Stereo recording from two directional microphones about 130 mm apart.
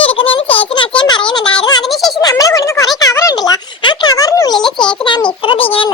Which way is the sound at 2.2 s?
30° left (ahead or behind).